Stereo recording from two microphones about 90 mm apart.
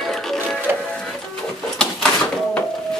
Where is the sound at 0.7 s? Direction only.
20° right (ahead or behind).